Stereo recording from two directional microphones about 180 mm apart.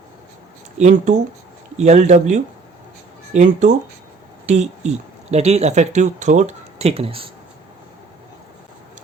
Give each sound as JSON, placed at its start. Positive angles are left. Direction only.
{"t": 0.8, "sound": "speech", "side_deg": -40}